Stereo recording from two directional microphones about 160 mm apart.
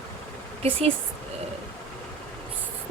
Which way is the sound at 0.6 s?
40° right (ahead or behind).